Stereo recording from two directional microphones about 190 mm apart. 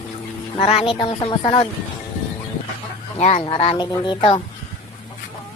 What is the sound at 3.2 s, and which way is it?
A child's voice, 30° left (ahead or behind).